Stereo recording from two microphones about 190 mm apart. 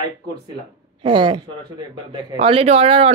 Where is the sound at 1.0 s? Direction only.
25° right (ahead or behind).